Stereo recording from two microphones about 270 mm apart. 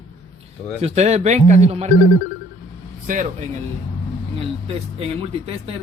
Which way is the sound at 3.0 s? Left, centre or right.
Right.